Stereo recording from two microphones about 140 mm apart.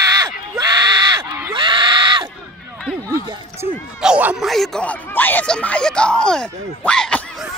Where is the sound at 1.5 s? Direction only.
35° right (ahead or behind).